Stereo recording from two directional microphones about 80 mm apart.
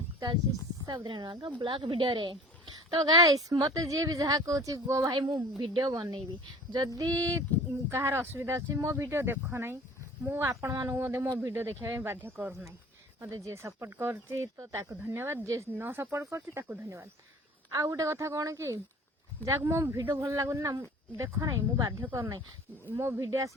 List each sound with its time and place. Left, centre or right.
0.9 s speech: right
3.1 s speech: right
5.1 s a woman's voice: right
6.7 s speech: right
7.9 s speech: right
13.1 s speech: right
15.0 s speech: right
15.7 s speech: right
17.7 s speech: right